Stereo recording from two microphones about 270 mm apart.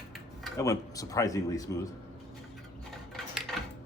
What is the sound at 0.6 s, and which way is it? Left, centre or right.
Speech, centre.